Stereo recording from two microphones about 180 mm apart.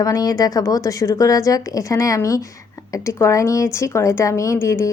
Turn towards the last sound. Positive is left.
turn(degrees=15)  # may be behind; listen again after turning